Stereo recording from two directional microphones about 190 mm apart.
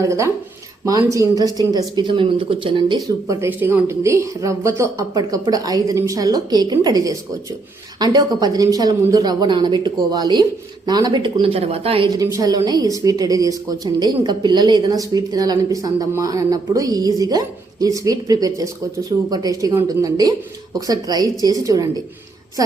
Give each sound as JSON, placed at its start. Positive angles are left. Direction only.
{"t": 0.0, "sound": "a woman's voice", "side_deg": -15}
{"t": 3.4, "sound": "a woman's voice", "side_deg": -10}
{"t": 12.1, "sound": "a woman's voice", "side_deg": -20}